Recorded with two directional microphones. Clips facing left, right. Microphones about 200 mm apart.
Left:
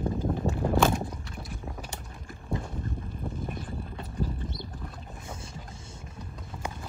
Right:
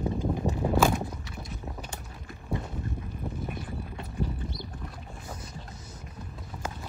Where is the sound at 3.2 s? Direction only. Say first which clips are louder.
Even; 5° right (ahead or behind).